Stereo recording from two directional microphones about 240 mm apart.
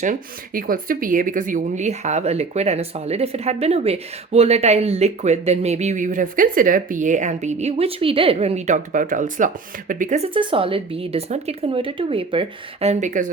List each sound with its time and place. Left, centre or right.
0.0 s speech: right